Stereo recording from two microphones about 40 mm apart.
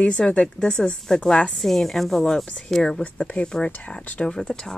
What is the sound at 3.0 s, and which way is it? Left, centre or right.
Speech, left.